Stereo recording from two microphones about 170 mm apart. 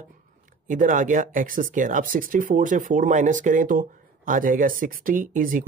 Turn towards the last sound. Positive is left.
turn(degrees=-50)  # may be behind; listen again after turning